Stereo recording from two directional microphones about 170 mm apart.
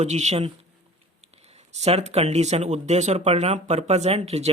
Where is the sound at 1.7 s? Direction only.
40° right (ahead or behind).